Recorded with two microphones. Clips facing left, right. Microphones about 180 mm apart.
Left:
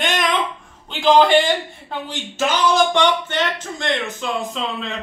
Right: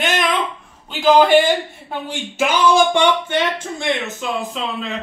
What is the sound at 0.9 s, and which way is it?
A man's voice, 5° right (ahead or behind).